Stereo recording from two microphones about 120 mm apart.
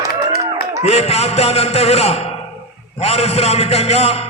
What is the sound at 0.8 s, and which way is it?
A man's voice, 65° left (ahead or behind).